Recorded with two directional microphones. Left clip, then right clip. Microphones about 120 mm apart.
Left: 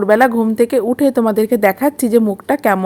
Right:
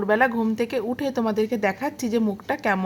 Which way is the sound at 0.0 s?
35° left (ahead or behind).